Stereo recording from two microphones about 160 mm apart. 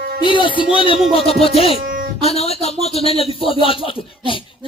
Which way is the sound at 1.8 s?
60° right (ahead or behind).